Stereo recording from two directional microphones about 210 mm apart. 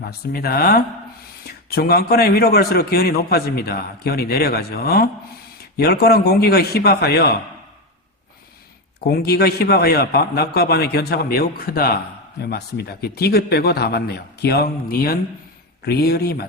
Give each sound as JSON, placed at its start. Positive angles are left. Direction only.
{"t": 0.1, "sound": "a man's voice", "side_deg": 50}
{"t": 9.0, "sound": "a man's voice", "side_deg": 50}